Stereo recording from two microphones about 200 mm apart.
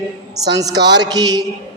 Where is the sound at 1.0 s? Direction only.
20° right (ahead or behind).